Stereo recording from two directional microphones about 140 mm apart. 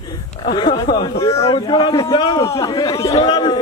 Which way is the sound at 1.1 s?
20° left (ahead or behind).